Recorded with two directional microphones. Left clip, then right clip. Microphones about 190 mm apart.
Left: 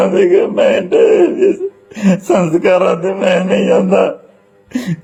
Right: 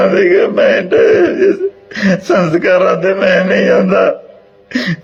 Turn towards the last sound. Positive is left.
turn(degrees=25)  # may be behind; listen again after turning